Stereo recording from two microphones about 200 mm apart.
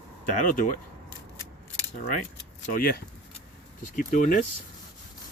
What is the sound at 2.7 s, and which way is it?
Speech, 50° left (ahead or behind).